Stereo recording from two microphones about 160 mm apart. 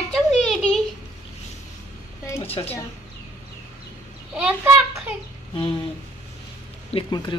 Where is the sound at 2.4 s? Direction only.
35° left (ahead or behind).